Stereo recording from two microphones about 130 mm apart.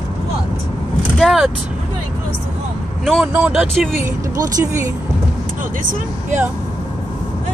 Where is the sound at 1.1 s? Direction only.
Centre (ahead or behind).